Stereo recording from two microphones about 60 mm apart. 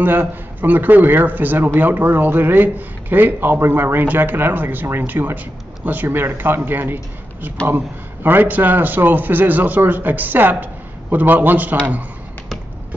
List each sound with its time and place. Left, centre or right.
0.0 s a man's voice: right